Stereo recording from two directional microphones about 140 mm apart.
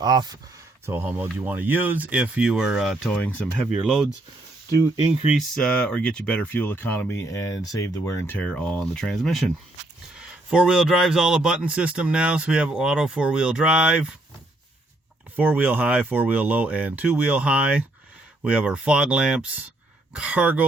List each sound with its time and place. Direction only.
0.0 s speech: 30° right (ahead or behind)
0.9 s a man's voice: 15° right (ahead or behind)
3.2 s speech: 10° left (ahead or behind)
5.2 s a man's voice: 5° right (ahead or behind)
5.5 s a man's voice: 5° left (ahead or behind)
15.4 s a man's voice: 10° right (ahead or behind)